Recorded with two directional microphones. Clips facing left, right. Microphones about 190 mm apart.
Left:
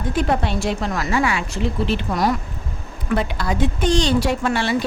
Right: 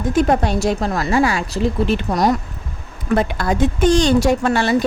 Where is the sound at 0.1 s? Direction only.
45° right (ahead or behind).